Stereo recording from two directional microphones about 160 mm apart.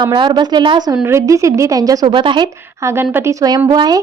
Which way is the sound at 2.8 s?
15° right (ahead or behind).